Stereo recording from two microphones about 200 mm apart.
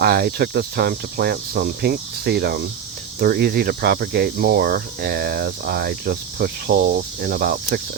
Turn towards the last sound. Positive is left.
turn(degrees=-50)  # may be behind; listen again after turning